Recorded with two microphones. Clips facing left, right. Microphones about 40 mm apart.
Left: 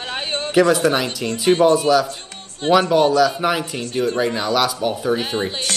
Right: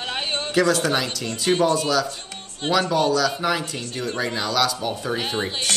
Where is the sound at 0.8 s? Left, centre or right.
Left.